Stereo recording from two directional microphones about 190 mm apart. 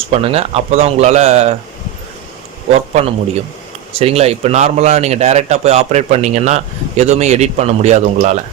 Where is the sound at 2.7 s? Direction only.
35° right (ahead or behind).